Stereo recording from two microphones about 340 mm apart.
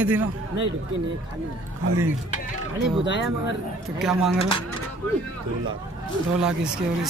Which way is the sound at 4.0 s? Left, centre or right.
Centre.